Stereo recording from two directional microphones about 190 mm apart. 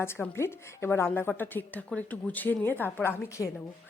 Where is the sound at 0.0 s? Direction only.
15° left (ahead or behind).